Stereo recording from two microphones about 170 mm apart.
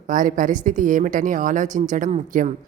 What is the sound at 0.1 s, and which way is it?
A woman's voice, 50° right (ahead or behind).